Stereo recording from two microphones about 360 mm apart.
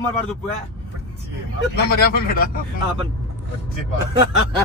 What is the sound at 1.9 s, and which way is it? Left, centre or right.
Speech, left.